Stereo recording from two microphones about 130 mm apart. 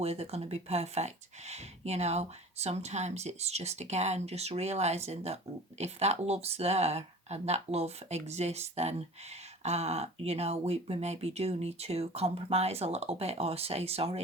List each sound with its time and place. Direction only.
0.0 s speech: 55° right (ahead or behind)